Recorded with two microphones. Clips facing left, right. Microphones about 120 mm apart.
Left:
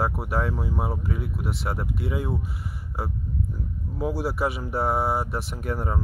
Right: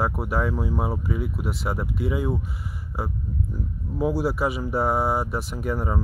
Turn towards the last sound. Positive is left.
turn(degrees=0)  # may be behind; listen again after turning